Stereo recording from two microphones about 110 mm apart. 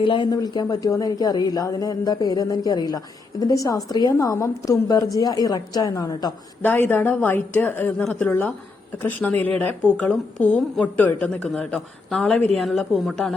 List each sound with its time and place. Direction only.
0.0 s speech: 50° left (ahead or behind)
0.3 s speech: 35° left (ahead or behind)
6.6 s a woman's voice: 15° left (ahead or behind)